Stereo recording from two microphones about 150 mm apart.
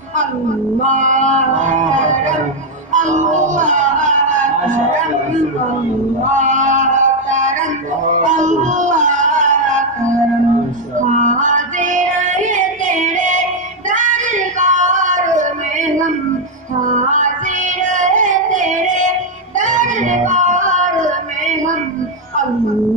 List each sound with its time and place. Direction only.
0.8 s music: 55° right (ahead or behind)
6.3 s music: 55° right (ahead or behind)
11.0 s music: 55° right (ahead or behind)
13.8 s a sound: 55° right (ahead or behind)
16.8 s music: 55° right (ahead or behind)